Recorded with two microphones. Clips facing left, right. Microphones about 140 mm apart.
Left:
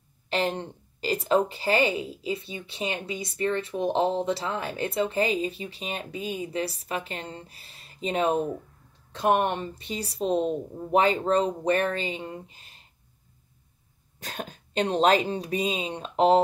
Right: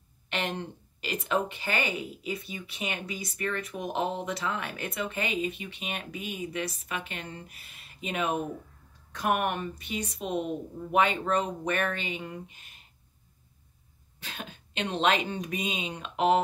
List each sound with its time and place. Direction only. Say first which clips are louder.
0.3 s a woman's voice: left 5 dB; 30° left (ahead or behind)
14.2 s a woman's voice: left 5 dB; 40° left (ahead or behind)